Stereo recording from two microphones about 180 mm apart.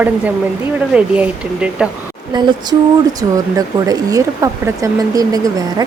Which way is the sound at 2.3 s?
25° right (ahead or behind).